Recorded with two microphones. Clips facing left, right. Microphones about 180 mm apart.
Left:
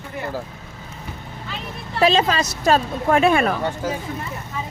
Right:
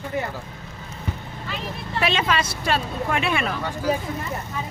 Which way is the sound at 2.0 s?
35° left (ahead or behind).